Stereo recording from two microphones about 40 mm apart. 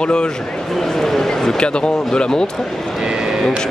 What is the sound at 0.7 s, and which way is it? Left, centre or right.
A man's voice, centre.